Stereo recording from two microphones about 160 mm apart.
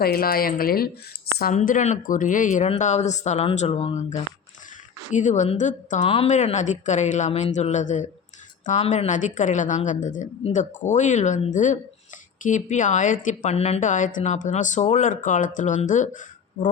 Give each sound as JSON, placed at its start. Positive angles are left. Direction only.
{"t": 0.0, "sound": "speech", "side_deg": 70}
{"t": 1.5, "sound": "a woman's voice", "side_deg": 50}
{"t": 6.0, "sound": "a woman's voice", "side_deg": 35}